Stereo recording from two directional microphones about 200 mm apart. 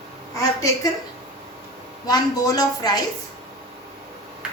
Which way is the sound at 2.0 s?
20° left (ahead or behind).